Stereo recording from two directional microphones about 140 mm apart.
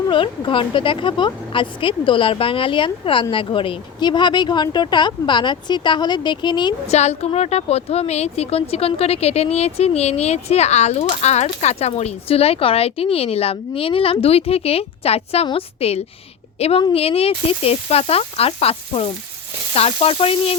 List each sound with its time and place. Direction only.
0.1 s a woman's voice: 35° left (ahead or behind)
6.8 s a woman's voice: 50° left (ahead or behind)